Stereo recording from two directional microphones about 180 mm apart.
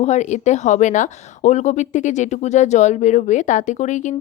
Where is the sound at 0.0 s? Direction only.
40° left (ahead or behind).